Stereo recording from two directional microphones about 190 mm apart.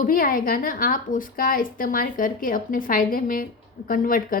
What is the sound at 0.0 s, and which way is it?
A woman's voice, 45° left (ahead or behind).